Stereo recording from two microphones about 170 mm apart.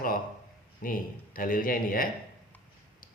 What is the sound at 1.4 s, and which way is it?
Speech, 55° left (ahead or behind).